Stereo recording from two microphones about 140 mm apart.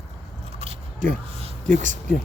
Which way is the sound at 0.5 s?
45° right (ahead or behind).